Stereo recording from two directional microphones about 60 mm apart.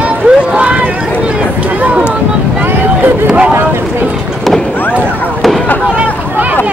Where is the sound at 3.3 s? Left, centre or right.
Centre.